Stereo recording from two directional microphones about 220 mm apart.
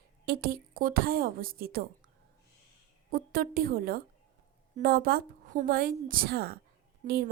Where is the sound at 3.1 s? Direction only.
40° right (ahead or behind).